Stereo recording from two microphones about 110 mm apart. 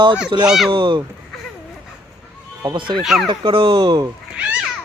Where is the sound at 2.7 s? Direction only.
45° right (ahead or behind).